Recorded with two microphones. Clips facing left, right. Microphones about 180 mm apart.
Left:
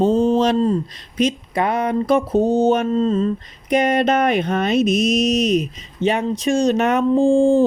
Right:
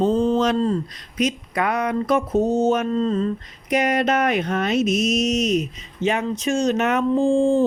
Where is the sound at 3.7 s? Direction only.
30° left (ahead or behind).